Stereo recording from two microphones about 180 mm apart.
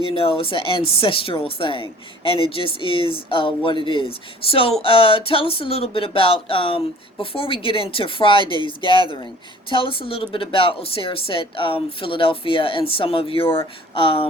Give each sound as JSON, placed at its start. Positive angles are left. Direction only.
{"t": 0.0, "sound": "speech", "side_deg": 30}